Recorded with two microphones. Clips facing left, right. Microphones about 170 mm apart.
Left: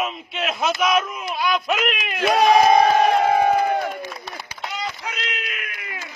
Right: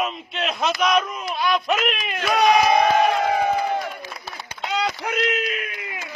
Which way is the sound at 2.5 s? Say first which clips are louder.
Left 2 dB; 35° left (ahead or behind).